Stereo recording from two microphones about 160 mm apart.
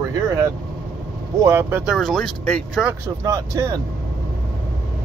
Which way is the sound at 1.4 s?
15° right (ahead or behind).